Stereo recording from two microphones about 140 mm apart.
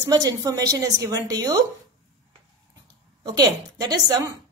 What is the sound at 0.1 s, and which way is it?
A woman's voice, 25° right (ahead or behind).